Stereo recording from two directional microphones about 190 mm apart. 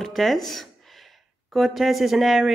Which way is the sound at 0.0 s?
Centre (ahead or behind).